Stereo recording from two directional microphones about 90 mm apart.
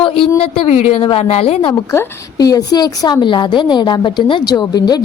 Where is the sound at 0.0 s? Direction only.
85° left.